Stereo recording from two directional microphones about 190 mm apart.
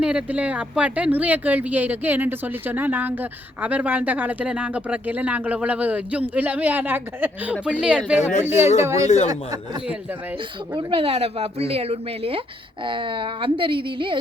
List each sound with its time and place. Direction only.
0.0 s speech: 5° right (ahead or behind)
8.2 s speech: 40° left (ahead or behind)
8.4 s speech: 10° right (ahead or behind)
10.8 s speech: 30° right (ahead or behind)